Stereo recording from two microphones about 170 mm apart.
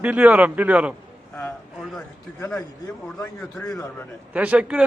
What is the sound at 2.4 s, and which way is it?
A man's voice, 10° left (ahead or behind).